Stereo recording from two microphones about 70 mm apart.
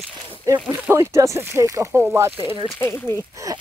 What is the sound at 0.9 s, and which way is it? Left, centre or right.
Speech, right.